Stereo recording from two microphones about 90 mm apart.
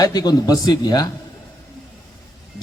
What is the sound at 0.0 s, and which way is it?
A man's voice, 45° left (ahead or behind).